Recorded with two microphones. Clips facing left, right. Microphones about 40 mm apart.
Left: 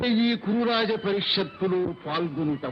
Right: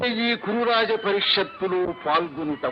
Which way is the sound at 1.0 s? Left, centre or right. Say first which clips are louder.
Right 4 dB; right.